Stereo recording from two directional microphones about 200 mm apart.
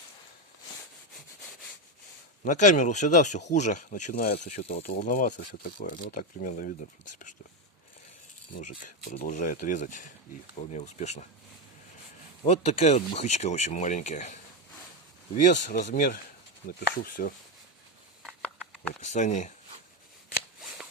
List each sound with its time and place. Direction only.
2.4 s speech: 40° left (ahead or behind)
8.5 s speech: 40° left (ahead or behind)
12.5 s speech: 30° left (ahead or behind)
15.4 s speech: 40° left (ahead or behind)
18.3 s a sound: centre (ahead or behind)
19.0 s speech: 35° left (ahead or behind)